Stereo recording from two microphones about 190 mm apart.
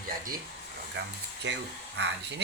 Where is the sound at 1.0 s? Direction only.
65° right (ahead or behind).